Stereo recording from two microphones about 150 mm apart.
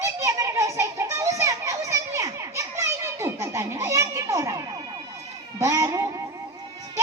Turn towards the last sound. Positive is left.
turn(degrees=-20)  # may be behind; listen again after turning